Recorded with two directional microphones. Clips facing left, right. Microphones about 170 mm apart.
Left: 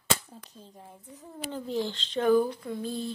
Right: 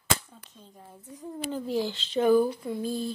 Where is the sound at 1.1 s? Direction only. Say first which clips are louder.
Right 4 dB; 10° right (ahead or behind).